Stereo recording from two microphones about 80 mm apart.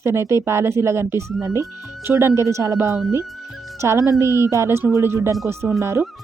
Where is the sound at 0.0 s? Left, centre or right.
Right.